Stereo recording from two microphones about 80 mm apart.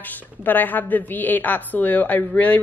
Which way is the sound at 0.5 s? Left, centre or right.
Left.